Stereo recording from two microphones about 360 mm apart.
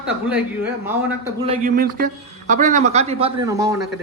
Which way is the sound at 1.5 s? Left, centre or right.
Right.